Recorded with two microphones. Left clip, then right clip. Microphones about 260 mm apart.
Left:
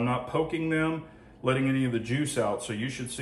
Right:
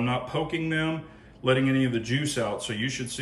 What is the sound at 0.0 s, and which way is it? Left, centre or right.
Speech, centre.